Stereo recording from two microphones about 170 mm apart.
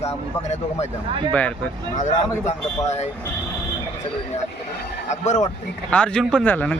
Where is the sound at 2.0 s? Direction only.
45° left (ahead or behind).